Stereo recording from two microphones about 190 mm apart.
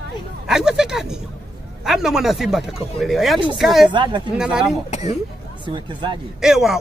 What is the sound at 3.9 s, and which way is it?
Speech, 25° right (ahead or behind).